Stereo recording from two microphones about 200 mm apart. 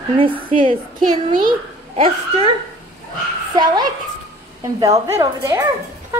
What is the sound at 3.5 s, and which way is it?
A woman's voice, 20° right (ahead or behind).